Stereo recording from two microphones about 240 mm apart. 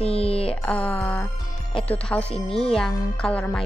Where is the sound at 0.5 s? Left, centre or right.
Centre.